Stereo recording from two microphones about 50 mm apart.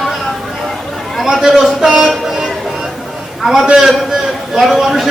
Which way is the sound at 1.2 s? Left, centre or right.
Centre.